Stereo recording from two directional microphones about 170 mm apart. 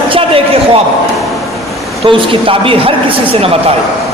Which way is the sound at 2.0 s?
30° right (ahead or behind).